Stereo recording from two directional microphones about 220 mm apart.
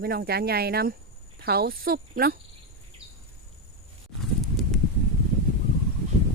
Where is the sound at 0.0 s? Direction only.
45° right (ahead or behind).